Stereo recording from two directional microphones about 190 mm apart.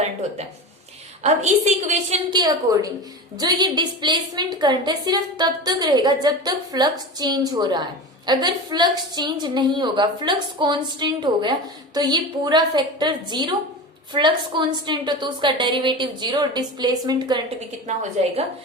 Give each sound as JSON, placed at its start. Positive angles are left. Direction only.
{"t": 1.2, "sound": "a woman's voice", "side_deg": -40}
{"t": 2.3, "sound": "a woman's voice", "side_deg": -20}
{"t": 17.8, "sound": "a woman's voice", "side_deg": -35}